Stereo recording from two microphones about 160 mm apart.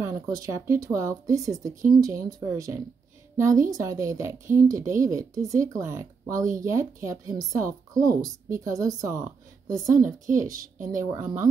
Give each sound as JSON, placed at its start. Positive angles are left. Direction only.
{"t": 0.0, "sound": "a woman's voice", "side_deg": -20}
{"t": 6.3, "sound": "speech", "side_deg": -55}
{"t": 6.6, "sound": "a woman's voice", "side_deg": -15}
{"t": 10.5, "sound": "a woman's voice", "side_deg": -55}
{"t": 11.0, "sound": "speech", "side_deg": -15}